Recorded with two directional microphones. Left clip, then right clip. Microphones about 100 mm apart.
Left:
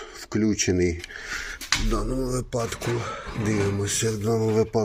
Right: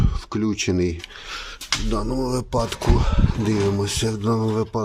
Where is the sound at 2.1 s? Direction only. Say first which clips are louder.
Right 4 dB; 70° right (ahead or behind); by 4.4 s 50° right (ahead or behind).